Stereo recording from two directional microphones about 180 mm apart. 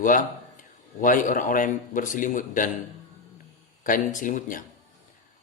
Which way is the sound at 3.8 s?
45° left (ahead or behind).